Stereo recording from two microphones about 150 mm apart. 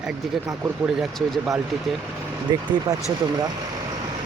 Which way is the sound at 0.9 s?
Centre (ahead or behind).